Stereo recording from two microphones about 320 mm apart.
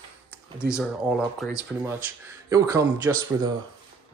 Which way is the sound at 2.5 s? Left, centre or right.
Centre.